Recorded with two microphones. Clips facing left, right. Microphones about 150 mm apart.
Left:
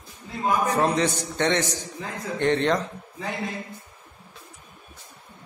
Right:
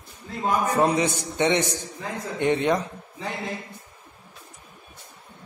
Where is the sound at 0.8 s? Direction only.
10° right (ahead or behind).